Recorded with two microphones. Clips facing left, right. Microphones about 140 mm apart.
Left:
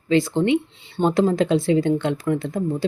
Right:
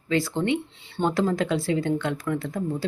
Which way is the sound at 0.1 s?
20° left (ahead or behind).